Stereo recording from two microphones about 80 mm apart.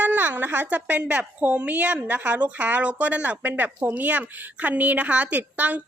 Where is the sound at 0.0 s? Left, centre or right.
Right.